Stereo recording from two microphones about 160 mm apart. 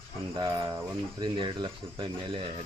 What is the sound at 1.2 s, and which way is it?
Speech, 30° right (ahead or behind).